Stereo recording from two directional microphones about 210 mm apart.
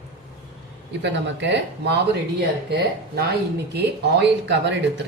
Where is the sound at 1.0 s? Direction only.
55° right (ahead or behind).